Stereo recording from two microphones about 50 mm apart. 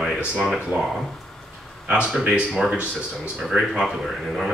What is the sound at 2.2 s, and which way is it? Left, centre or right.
Speech, centre.